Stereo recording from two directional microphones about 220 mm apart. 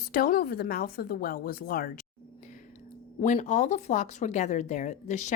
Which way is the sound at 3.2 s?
35° left (ahead or behind).